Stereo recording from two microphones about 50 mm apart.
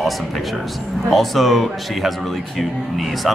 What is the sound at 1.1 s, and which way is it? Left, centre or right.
Speech, centre.